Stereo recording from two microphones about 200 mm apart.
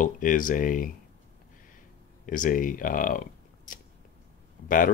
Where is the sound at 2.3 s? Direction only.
45° left (ahead or behind).